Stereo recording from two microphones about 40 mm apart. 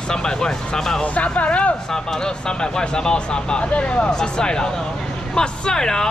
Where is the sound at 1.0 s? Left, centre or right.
Left.